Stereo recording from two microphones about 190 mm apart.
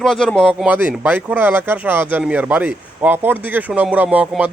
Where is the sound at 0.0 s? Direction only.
Centre (ahead or behind).